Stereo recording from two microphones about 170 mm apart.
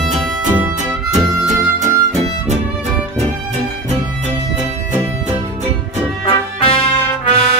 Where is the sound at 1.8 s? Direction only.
40° right (ahead or behind).